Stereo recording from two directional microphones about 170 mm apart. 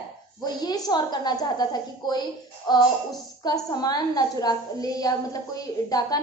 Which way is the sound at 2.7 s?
25° left (ahead or behind).